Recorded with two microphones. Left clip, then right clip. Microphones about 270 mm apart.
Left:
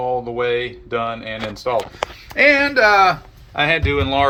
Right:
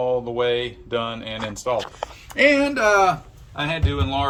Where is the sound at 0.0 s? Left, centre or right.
Centre.